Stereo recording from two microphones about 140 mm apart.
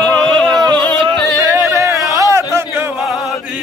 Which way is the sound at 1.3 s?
20° right (ahead or behind).